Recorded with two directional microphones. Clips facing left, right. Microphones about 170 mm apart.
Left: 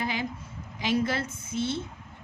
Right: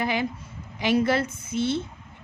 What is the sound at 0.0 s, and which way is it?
A woman's voice, 70° right (ahead or behind).